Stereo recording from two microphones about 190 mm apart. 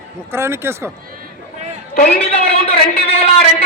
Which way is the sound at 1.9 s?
50° left (ahead or behind).